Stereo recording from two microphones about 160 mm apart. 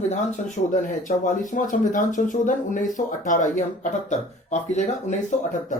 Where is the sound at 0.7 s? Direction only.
55° left (ahead or behind).